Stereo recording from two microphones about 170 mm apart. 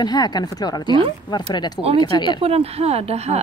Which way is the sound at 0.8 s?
30° right (ahead or behind).